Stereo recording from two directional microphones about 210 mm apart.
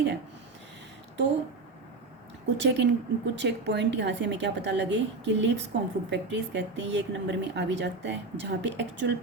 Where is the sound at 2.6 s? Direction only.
60° right (ahead or behind).